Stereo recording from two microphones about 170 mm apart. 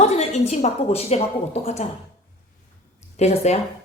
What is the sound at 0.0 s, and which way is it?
Speech, 40° left (ahead or behind).